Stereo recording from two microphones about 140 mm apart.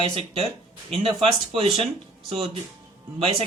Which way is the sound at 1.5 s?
45° right (ahead or behind).